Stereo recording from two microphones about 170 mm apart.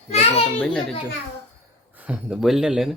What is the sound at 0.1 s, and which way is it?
Children playing, 40° left (ahead or behind).